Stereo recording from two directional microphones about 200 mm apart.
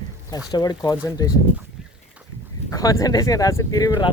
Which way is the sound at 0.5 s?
20° left (ahead or behind).